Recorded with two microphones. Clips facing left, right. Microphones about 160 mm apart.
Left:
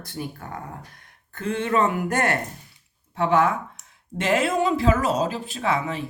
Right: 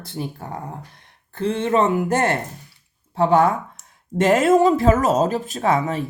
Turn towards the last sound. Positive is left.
turn(degrees=-40)  # may be behind; listen again after turning